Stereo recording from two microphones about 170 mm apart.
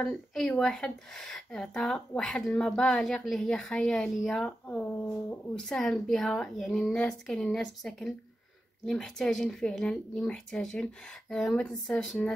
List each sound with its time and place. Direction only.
0.0 s a woman's voice: 5° left (ahead or behind)